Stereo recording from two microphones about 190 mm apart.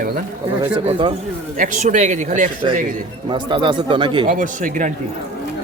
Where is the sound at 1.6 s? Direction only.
40° right (ahead or behind).